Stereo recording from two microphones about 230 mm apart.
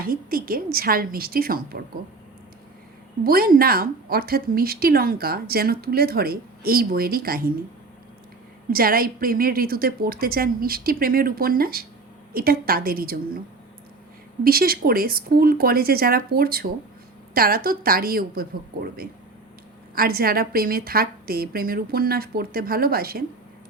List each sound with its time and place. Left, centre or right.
0.0 s speech: right
3.2 s speech: right
8.7 s speech: right
14.4 s speech: right